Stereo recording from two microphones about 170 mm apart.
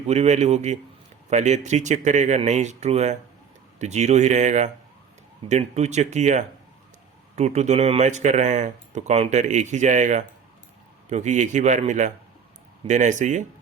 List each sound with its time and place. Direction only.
0.1 s speech: 40° right (ahead or behind)